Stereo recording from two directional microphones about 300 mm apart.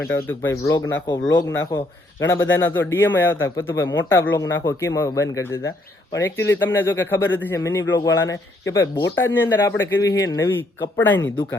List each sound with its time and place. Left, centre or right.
0.0 s speech: left
0.3 s a man's voice: centre